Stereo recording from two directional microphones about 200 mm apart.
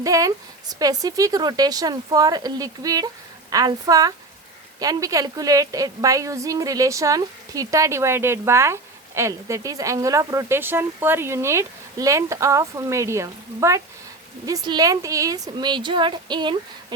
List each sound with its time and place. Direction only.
0.0 s a woman's voice: 15° right (ahead or behind)